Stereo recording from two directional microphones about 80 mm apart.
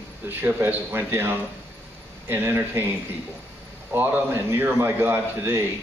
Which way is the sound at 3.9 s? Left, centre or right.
Right.